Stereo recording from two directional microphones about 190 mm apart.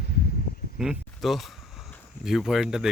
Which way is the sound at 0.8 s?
Centre (ahead or behind).